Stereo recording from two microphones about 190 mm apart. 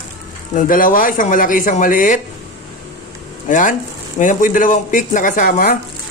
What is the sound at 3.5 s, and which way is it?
Speech, 45° left (ahead or behind).